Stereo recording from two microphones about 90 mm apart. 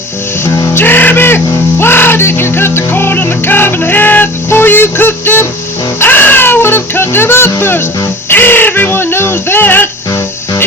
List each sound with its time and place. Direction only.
0.7 s music: 25° left (ahead or behind)
7.6 s speech: 25° left (ahead or behind)
8.3 s a sound: 25° left (ahead or behind)